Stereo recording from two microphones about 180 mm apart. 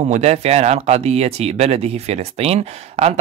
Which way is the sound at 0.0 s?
35° right (ahead or behind).